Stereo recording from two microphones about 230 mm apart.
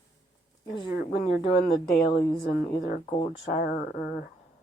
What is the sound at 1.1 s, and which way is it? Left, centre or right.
Speech, left.